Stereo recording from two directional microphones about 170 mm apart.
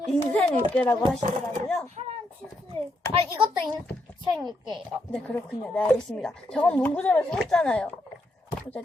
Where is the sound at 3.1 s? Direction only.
30° right (ahead or behind).